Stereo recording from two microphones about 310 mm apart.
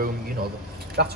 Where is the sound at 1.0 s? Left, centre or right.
Right.